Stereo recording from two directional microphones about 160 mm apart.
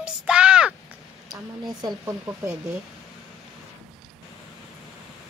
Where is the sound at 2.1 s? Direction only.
15° right (ahead or behind).